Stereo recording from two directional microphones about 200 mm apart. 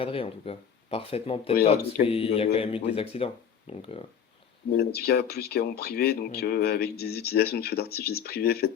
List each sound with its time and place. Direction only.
0.0 s speech: 25° left (ahead or behind)
4.8 s speech: 50° left (ahead or behind)